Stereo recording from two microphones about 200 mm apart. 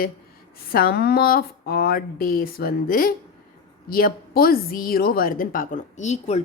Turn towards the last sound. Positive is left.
turn(degrees=35)  # may be behind; listen again after turning